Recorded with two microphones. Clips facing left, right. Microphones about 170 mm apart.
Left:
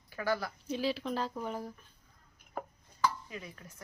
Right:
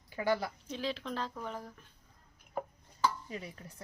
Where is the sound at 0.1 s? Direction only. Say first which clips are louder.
Right 2 dB; 20° right (ahead or behind).